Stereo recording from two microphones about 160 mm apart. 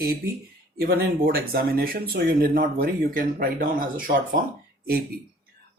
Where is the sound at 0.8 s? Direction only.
70° right (ahead or behind).